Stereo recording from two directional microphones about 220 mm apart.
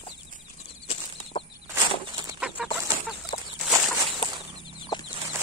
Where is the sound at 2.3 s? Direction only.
5° right (ahead or behind).